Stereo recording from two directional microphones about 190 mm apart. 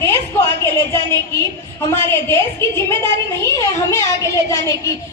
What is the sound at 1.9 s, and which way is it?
A woman's voice, 15° left (ahead or behind).